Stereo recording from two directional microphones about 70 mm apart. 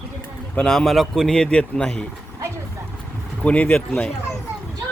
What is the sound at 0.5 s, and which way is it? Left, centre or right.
A man's voice, centre.